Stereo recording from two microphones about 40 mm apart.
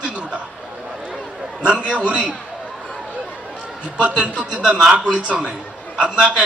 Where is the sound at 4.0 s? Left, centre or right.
Right.